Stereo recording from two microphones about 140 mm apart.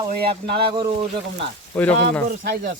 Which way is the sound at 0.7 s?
35° right (ahead or behind).